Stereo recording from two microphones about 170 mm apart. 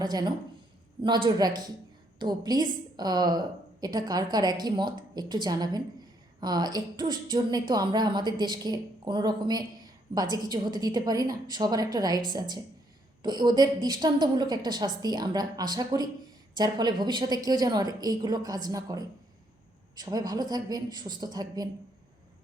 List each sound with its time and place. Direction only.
0.0 s a woman's voice: 25° right (ahead or behind)